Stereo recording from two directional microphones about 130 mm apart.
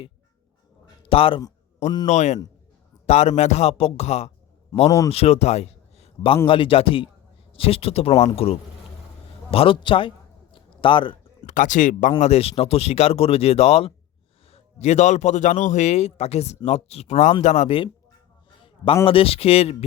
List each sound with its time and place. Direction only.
1.0 s a man's voice: 45° left (ahead or behind)
2.0 s a man's voice: 60° left (ahead or behind); by 10.1 s 40° left (ahead or behind)
10.5 s a sound: 40° left (ahead or behind)
11.4 s speech: 80° left
12.2 s a man's voice: 50° left (ahead or behind)
19.0 s speech: 45° left (ahead or behind)